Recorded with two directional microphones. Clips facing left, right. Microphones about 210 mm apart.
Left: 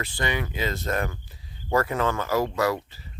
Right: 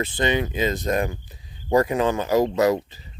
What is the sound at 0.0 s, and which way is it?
Speech, 20° right (ahead or behind).